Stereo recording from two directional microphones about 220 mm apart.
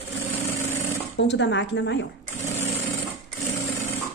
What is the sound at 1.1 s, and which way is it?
Speech, 50° left (ahead or behind).